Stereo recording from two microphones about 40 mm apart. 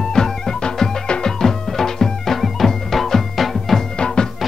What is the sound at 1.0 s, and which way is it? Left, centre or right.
Music, left.